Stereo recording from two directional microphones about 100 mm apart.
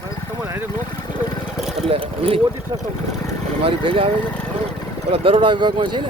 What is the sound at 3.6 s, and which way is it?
Speech, 70° right (ahead or behind).